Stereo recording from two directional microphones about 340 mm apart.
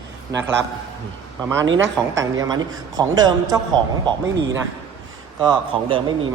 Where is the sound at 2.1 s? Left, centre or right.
Centre.